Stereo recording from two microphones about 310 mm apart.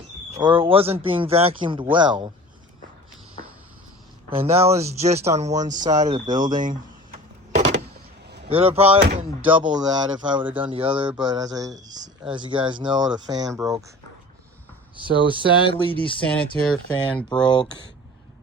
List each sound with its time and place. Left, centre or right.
0.3 s speech: centre
4.4 s speech: centre
8.4 s speech: centre
9.0 s speech: right
9.5 s speech: centre
11.8 s speech: right
14.9 s speech: centre
16.2 s speech: centre
17.4 s speech: centre